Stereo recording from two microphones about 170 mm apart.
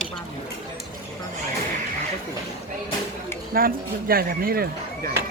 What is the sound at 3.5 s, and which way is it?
Speech, 60° right (ahead or behind).